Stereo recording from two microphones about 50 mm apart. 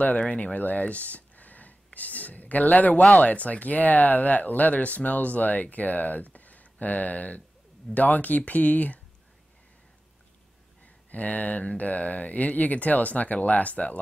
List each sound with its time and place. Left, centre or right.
0.0 s speech: left
10.8 s speech: left